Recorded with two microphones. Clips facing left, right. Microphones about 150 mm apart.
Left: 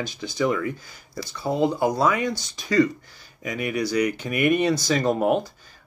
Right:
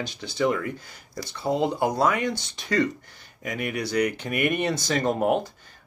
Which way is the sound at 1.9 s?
60° right (ahead or behind).